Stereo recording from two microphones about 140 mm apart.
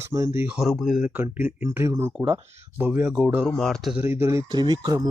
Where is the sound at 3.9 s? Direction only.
15° right (ahead or behind).